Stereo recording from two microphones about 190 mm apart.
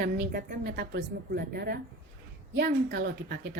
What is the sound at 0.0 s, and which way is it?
Speech, 50° right (ahead or behind).